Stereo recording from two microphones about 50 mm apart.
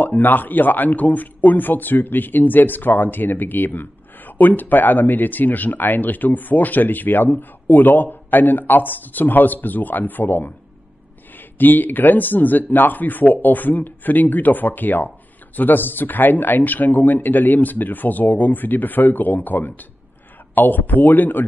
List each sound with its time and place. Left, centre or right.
0.0 s speech: left
11.5 s speech: left